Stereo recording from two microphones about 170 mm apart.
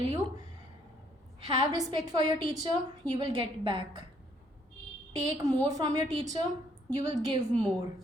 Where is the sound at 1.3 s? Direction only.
25° right (ahead or behind).